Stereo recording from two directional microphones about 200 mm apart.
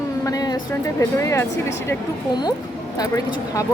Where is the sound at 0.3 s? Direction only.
20° left (ahead or behind).